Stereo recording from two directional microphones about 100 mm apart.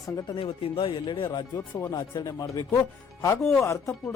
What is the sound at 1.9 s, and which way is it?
Speech, 40° left (ahead or behind).